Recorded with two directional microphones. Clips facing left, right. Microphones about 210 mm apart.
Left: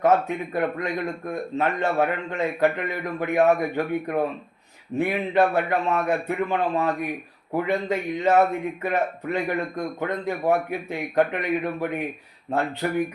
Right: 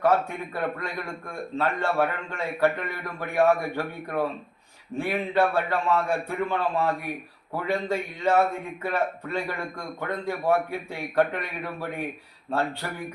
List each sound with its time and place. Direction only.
0.0 s speech: 20° left (ahead or behind)